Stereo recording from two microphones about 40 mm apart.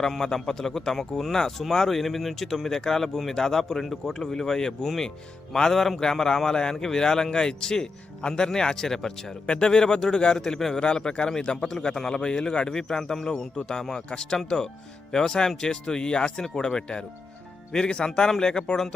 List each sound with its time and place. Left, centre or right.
0.2 s a man's voice: centre
10.4 s a man's voice: centre